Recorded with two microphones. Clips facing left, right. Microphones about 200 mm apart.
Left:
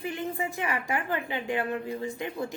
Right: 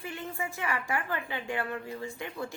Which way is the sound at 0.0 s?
20° left (ahead or behind).